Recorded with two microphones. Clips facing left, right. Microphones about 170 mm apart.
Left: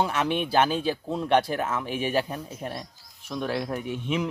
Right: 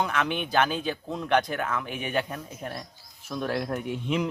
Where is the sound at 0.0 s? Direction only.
30° left (ahead or behind).